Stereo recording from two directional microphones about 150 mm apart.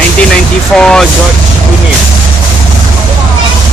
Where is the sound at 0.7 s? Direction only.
5° left (ahead or behind).